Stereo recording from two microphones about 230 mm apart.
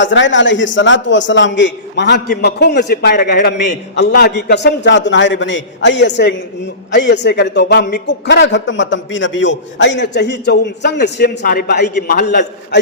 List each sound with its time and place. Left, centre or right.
0.0 s a man's voice: left